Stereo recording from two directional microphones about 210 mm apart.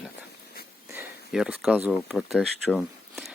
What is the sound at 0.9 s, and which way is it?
Speech, centre (ahead or behind).